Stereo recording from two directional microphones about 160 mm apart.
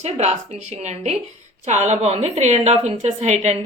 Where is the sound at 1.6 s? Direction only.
45° right (ahead or behind).